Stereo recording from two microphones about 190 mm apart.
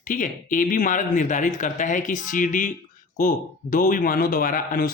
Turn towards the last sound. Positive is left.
turn(degrees=45)  # may be behind; listen again after turning